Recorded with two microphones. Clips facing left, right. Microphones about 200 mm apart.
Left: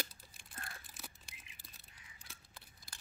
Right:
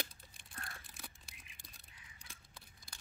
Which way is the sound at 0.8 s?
Centre (ahead or behind).